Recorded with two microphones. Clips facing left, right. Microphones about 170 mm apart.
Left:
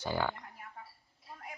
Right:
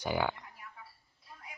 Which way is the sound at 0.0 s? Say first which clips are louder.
Right 2 dB; 15° right (ahead or behind).